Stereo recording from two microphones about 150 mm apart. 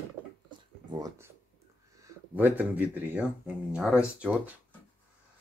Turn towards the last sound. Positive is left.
turn(degrees=-5)  # may be behind; listen again after turning